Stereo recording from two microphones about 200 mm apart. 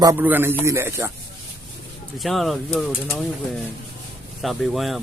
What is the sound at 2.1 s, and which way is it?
Speech, centre (ahead or behind).